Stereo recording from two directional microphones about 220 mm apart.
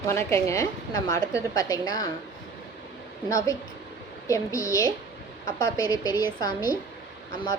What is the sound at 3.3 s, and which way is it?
A woman's voice, 15° left (ahead or behind).